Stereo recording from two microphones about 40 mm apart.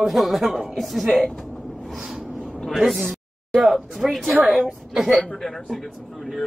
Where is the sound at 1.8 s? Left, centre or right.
Centre.